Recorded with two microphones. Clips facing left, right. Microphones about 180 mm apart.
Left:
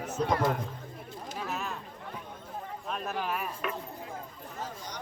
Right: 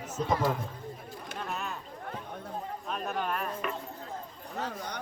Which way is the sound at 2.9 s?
Centre (ahead or behind).